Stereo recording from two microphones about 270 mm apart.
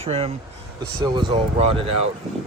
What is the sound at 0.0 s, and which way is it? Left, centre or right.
Speech, right.